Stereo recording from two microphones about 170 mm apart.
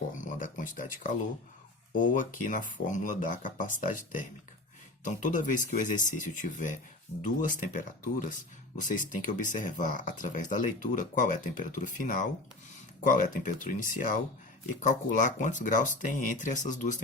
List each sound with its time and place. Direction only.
0.2 s speech: 50° left (ahead or behind)